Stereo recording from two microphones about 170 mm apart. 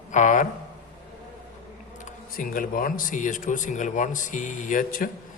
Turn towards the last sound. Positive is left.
turn(degrees=55)  # may be behind; listen again after turning